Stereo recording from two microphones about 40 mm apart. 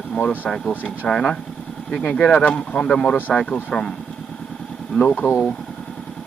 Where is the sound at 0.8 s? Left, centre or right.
Left.